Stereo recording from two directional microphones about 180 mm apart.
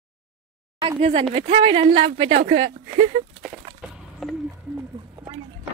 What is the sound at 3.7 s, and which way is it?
Wood, 30° right (ahead or behind).